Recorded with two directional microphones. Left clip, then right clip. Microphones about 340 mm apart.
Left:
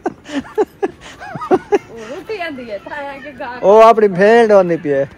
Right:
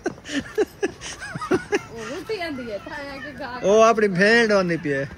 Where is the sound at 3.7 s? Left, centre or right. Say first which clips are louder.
Left 9 dB; centre.